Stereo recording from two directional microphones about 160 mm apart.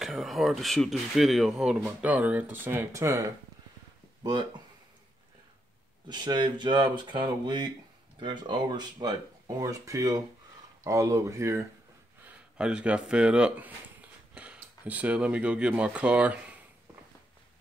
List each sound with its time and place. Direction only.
0.0 s speech: centre (ahead or behind); by 4.5 s 25° right (ahead or behind)
6.0 s speech: 25° right (ahead or behind)
12.5 s speech: 5° right (ahead or behind)